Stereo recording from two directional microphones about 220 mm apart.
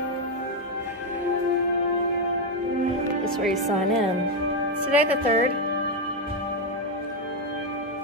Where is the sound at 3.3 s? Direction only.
Centre (ahead or behind).